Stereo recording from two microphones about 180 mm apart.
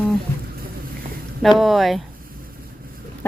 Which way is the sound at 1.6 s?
Centre (ahead or behind).